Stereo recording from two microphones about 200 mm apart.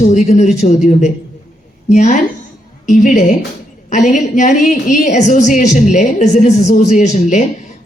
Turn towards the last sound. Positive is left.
turn(degrees=35)  # may be behind; listen again after turning